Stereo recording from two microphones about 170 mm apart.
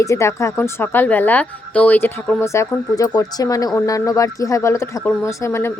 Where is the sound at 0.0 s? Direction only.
15° left (ahead or behind).